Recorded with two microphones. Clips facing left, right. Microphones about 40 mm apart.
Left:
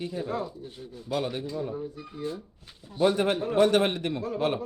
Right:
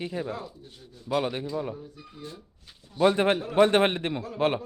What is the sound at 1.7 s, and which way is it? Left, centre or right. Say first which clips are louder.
A child's voice: left 7 dB; centre.